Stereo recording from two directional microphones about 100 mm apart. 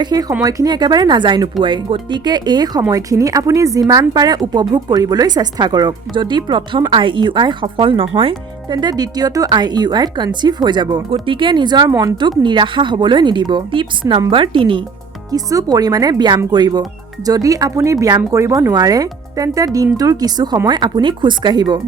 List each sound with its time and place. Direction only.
0.0 s speech: 40° right (ahead or behind)
11.1 s speech: 60° right (ahead or behind)
15.3 s speech: 35° right (ahead or behind)